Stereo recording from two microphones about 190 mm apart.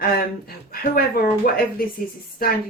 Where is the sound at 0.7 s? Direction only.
50° left (ahead or behind).